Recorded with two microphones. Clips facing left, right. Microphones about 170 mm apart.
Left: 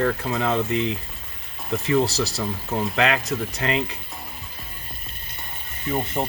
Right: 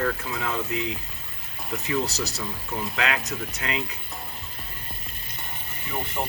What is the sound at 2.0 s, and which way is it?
Speech, 30° left (ahead or behind).